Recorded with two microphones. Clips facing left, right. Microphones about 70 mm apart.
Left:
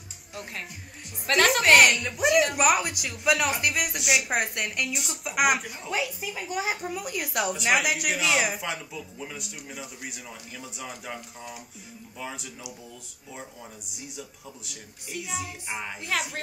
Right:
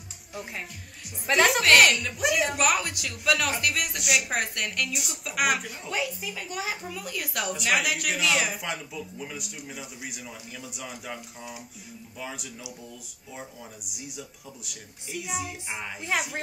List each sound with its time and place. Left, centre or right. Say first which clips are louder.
0.3 s speech: right 1 dB; centre
1.8 s speech: left 1 dB; centre
4.4 s speech: left 1 dB; centre
4.9 s speech: left 1 dB; centre
5.2 s speech: left 2 dB; centre
6.6 s speech: left 3 dB; left; by 12.4 s centre
13.9 s speech: right 1 dB; centre